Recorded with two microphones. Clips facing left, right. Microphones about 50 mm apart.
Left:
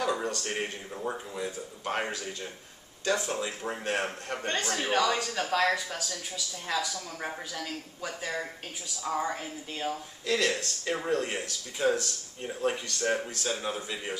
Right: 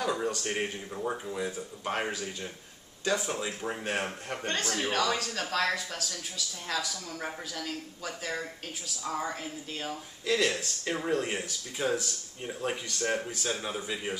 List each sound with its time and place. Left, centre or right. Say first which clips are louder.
0.2 s a man's voice: right 1 dB; centre
10.2 s a man's voice: even; centre